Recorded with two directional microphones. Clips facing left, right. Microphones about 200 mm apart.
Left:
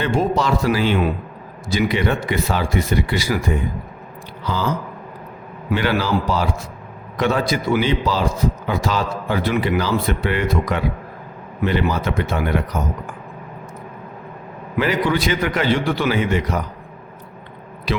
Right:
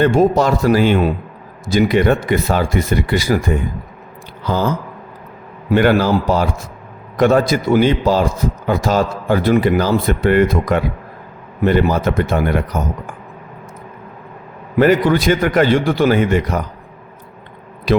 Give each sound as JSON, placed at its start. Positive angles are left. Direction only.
{"t": 0.0, "sound": "a man's voice", "side_deg": -45}
{"t": 5.7, "sound": "a man's voice", "side_deg": -50}
{"t": 14.8, "sound": "a man's voice", "side_deg": -50}